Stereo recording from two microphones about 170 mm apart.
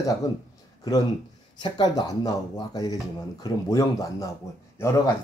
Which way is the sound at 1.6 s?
25° left (ahead or behind).